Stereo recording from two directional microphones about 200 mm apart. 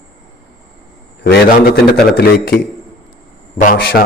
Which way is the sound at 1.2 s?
50° left (ahead or behind).